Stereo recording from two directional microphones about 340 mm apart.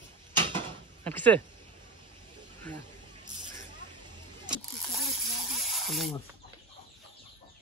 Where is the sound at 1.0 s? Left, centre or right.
Centre.